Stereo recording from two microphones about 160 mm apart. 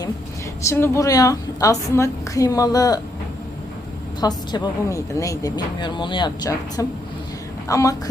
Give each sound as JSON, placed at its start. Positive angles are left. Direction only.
{"t": 0.6, "sound": "speech", "side_deg": 15}
{"t": 4.2, "sound": "speech", "side_deg": 25}